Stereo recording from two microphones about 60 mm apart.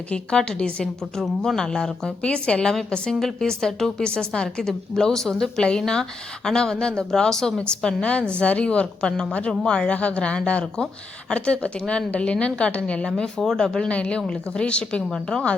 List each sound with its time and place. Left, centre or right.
0.1 s a woman's voice: centre
15.1 s a woman's voice: centre